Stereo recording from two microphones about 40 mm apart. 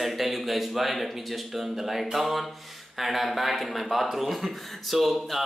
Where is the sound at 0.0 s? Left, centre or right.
Centre.